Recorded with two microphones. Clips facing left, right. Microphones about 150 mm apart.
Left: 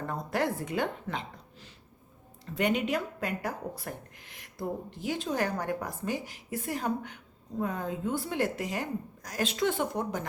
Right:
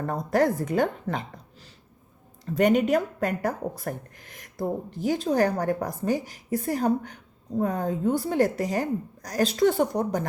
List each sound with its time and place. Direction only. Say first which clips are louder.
0.0 s speech: right 7 dB; 40° right (ahead or behind)
2.6 s speech: right 8 dB; 45° right (ahead or behind)